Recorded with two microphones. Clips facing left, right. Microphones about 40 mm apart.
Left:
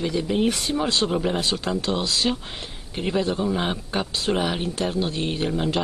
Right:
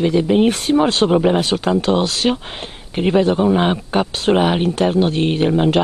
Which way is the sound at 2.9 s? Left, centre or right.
Right.